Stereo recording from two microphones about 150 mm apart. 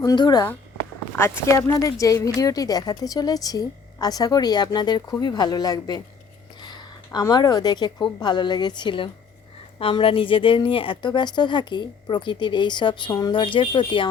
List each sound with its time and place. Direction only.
0.0 s a woman's voice: 25° left (ahead or behind)